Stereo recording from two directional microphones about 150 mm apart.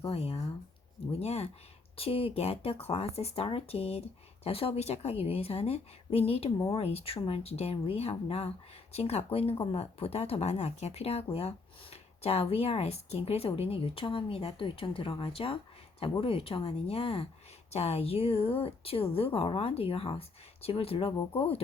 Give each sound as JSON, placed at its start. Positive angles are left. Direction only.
{"t": 0.1, "sound": "speech", "side_deg": 40}